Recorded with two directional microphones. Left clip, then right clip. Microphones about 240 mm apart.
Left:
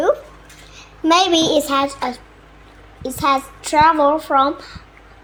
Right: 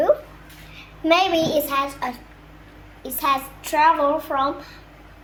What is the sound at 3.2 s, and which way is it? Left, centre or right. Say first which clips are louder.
A child's voice: left 4 dB; left.